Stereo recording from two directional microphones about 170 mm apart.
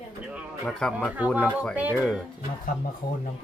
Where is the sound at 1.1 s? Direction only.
10° right (ahead or behind).